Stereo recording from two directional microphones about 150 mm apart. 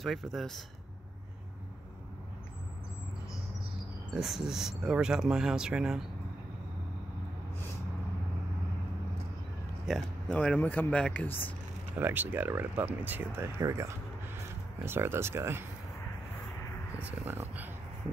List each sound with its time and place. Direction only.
0.0 s speech: centre (ahead or behind)
4.1 s speech: 5° right (ahead or behind)
9.8 s speech: 5° left (ahead or behind)
12.0 s speech: 15° right (ahead or behind)
17.0 s speech: 10° right (ahead or behind)